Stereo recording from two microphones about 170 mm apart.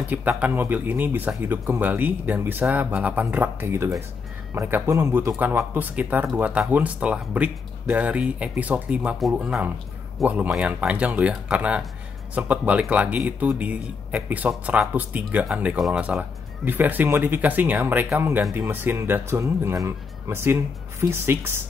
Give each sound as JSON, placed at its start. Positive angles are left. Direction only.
{"t": 0.1, "sound": "speech", "side_deg": -10}
{"t": 18.7, "sound": "speech", "side_deg": -10}